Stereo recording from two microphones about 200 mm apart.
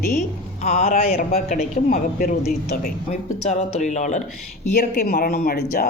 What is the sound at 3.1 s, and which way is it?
Speech, 35° left (ahead or behind).